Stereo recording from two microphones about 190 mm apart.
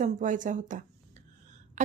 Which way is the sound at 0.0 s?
40° right (ahead or behind).